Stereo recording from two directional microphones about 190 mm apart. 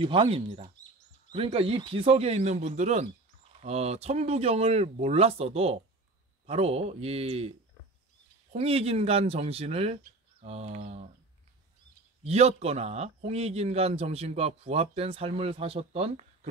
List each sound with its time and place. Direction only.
0.0 s speech: 30° right (ahead or behind)
8.5 s speech: 30° right (ahead or behind)
12.3 s speech: 35° right (ahead or behind)